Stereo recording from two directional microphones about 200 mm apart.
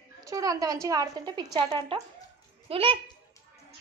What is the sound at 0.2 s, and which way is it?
A woman's voice, 15° right (ahead or behind).